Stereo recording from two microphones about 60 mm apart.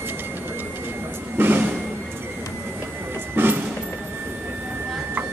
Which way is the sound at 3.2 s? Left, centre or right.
Right.